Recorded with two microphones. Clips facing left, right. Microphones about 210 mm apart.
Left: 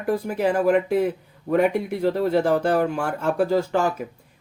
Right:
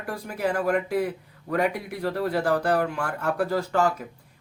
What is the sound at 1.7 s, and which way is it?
Speech, 25° left (ahead or behind).